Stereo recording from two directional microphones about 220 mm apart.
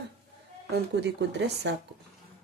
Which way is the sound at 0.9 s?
50° right (ahead or behind).